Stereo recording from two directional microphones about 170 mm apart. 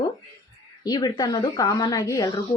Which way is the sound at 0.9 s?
25° left (ahead or behind).